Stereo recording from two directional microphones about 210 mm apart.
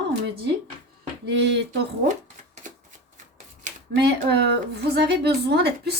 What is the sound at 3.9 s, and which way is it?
A woman's voice, 50° right (ahead or behind).